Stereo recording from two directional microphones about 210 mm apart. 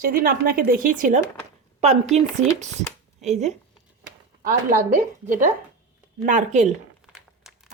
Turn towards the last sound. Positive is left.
turn(degrees=0)  # may be behind; listen again after turning